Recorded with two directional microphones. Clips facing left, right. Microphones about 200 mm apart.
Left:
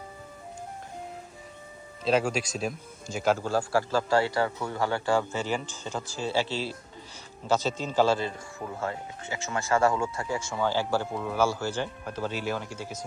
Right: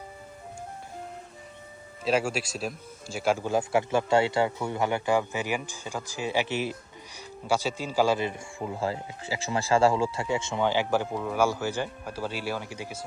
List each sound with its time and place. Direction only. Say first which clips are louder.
2.0 s speech: left 1 dB; 5° right (ahead or behind)
8.8 s speech: right 2 dB; 30° right (ahead or behind); by 11.2 s 15° right (ahead or behind)
11.2 s speech: right 1 dB; 5° right (ahead or behind)
11.4 s speech: right 1 dB; 15° right (ahead or behind)